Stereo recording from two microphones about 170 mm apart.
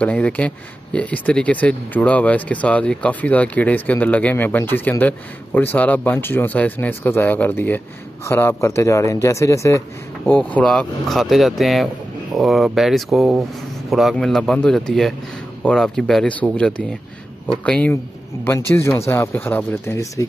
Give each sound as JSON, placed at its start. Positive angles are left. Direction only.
{"t": 0.0, "sound": "speech", "side_deg": 10}